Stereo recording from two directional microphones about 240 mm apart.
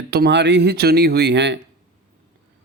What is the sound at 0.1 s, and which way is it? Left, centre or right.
A man's voice, right.